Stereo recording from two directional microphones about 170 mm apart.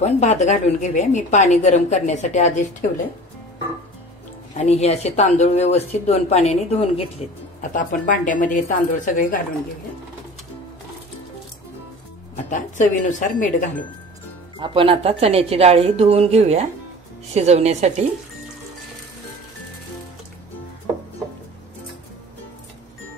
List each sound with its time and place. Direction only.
0.0 s a woman's voice: 45° left (ahead or behind)
4.6 s speech: 40° left (ahead or behind)
7.7 s a woman's voice: 50° left (ahead or behind)
12.4 s a woman's voice: 50° left (ahead or behind)
14.6 s a woman's voice: 30° right (ahead or behind)